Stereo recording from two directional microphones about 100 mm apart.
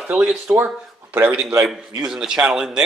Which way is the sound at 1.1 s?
20° right (ahead or behind).